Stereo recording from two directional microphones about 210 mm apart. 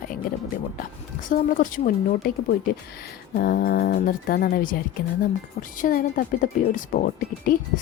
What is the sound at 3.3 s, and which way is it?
A woman's voice, 45° left (ahead or behind).